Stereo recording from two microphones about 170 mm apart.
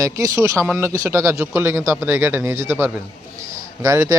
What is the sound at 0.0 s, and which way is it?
Speech, 20° right (ahead or behind).